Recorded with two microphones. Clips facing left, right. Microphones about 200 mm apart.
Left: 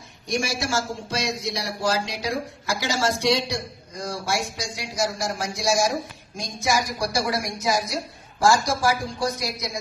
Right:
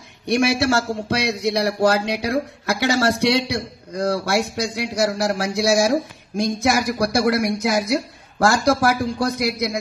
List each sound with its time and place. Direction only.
0.3 s speech: 65° right (ahead or behind)